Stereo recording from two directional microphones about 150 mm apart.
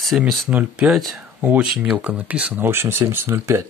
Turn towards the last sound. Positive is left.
turn(degrees=-15)  # may be behind; listen again after turning